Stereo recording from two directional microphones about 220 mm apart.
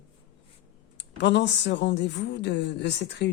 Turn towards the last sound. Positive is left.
turn(degrees=50)  # may be behind; listen again after turning